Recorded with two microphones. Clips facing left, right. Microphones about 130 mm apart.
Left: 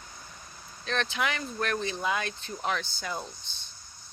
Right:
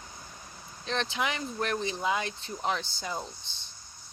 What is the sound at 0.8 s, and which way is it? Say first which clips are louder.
Speech: left 1 dB; 25° right (ahead or behind).